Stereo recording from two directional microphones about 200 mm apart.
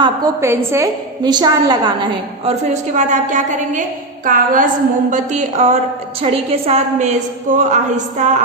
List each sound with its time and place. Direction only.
0.0 s a woman's voice: 15° right (ahead or behind)
2.9 s a woman's voice: 35° right (ahead or behind)